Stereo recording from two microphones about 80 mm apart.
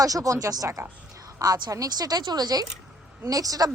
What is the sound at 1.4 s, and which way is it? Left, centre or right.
Speech, right.